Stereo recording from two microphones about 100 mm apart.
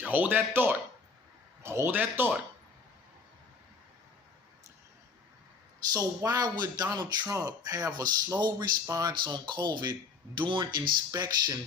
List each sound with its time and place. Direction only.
0.0 s speech: 15° right (ahead or behind)
5.9 s speech: 40° right (ahead or behind)
11.1 s speech: 40° right (ahead or behind)